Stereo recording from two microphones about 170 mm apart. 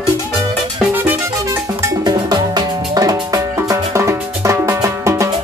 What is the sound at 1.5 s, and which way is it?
Music, 20° right (ahead or behind).